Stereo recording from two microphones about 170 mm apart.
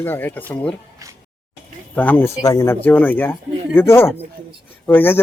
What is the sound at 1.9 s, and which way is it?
Speech, 10° left (ahead or behind).